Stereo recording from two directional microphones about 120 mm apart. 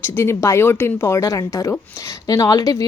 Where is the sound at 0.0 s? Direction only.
20° left (ahead or behind).